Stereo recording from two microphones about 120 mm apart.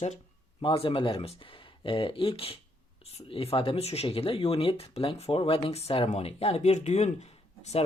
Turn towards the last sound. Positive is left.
turn(degrees=65)  # may be behind; listen again after turning